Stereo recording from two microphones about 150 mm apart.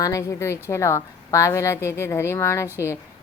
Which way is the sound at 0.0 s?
20° left (ahead or behind).